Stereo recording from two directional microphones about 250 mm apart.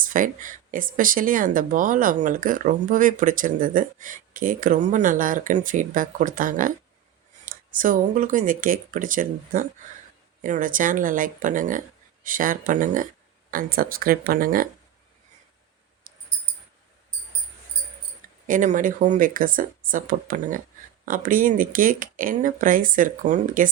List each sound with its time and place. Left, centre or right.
0.0 s speech: right
18.4 s speech: right